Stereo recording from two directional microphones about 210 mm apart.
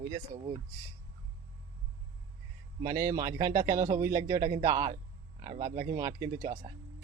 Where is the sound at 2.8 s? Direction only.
15° right (ahead or behind).